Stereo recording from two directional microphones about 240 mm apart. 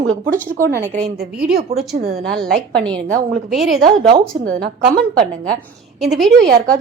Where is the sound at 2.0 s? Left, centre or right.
Right.